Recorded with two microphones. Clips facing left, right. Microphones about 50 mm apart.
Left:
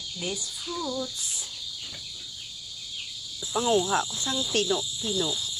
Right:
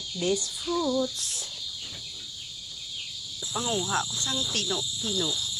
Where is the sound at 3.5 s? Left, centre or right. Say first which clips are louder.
Left 5 dB; centre.